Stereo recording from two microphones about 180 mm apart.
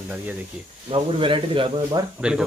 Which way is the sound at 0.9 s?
30° right (ahead or behind).